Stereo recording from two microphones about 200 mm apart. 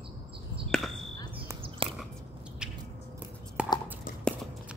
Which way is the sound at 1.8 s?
25° right (ahead or behind).